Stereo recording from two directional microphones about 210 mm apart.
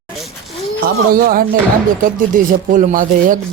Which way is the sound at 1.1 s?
40° right (ahead or behind).